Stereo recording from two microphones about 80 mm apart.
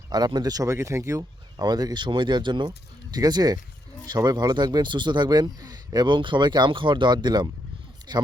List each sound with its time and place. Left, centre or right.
0.1 s speech: right
1.5 s speech: right
2.6 s speech: right